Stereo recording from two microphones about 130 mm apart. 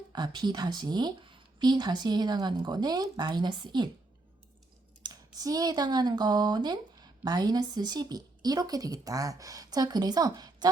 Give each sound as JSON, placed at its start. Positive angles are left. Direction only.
{"t": 0.1, "sound": "speech", "side_deg": -35}
{"t": 5.0, "sound": "speech", "side_deg": -30}